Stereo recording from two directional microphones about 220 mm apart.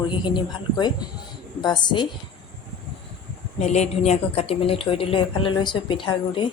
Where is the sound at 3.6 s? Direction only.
30° left (ahead or behind).